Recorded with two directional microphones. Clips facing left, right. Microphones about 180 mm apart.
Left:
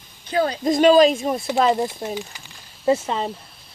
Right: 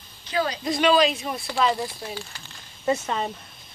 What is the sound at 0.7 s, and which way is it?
Speech, 45° left (ahead or behind).